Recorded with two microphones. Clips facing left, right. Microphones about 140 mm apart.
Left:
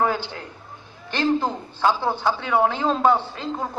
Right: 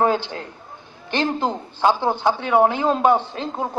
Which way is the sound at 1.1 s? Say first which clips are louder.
Even; 20° right (ahead or behind).